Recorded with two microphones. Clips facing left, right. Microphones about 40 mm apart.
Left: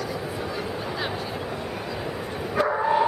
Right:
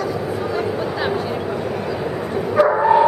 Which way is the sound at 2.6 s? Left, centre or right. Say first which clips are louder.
Right 8 dB; centre.